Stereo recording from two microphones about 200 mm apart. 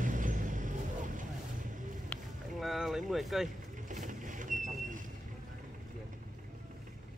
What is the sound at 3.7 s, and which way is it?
Vehicle, 40° right (ahead or behind).